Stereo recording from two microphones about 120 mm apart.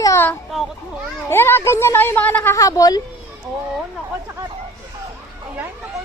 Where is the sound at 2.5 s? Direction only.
30° left (ahead or behind).